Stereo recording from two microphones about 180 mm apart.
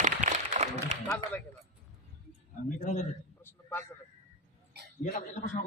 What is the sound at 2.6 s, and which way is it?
Speech, 40° left (ahead or behind).